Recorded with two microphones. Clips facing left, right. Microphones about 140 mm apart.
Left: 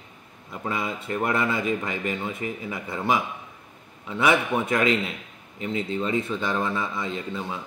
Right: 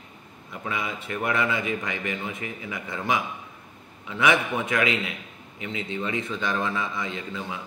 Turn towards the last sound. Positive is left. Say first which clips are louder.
# left 3 dB
turn(degrees=30)  # may be behind; listen again after turning